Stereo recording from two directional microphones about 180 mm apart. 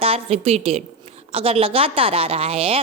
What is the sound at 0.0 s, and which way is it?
A woman's voice, 35° right (ahead or behind).